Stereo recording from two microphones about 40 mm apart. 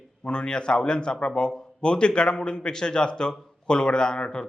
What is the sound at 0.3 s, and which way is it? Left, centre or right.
A man's voice, left.